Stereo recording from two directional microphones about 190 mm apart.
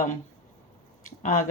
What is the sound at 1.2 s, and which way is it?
Speech, 45° left (ahead or behind).